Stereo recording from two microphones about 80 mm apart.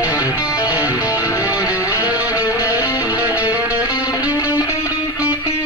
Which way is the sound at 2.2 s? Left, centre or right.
Left.